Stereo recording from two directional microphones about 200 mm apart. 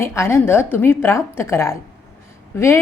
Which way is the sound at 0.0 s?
15° left (ahead or behind).